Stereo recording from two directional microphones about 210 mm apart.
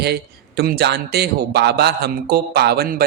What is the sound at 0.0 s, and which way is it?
A man's voice, 50° right (ahead or behind).